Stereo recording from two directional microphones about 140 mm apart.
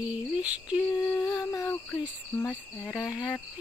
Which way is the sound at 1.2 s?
25° left (ahead or behind).